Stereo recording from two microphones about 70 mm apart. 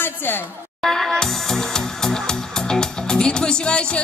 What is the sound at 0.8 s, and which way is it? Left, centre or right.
Music, centre.